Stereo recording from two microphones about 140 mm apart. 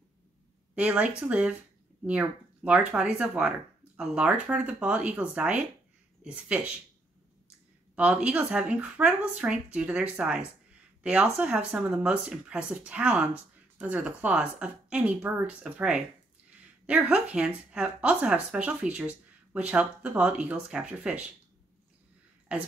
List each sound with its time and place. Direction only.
0.7 s speech: 10° right (ahead or behind)
7.9 s speech: 10° right (ahead or behind)